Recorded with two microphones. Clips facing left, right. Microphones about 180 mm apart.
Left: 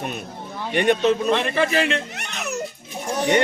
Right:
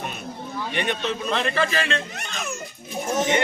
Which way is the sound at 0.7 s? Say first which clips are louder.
Left 8 dB; 45° left (ahead or behind).